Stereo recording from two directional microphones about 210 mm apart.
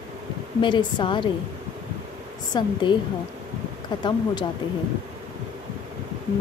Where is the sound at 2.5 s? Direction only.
20° left (ahead or behind).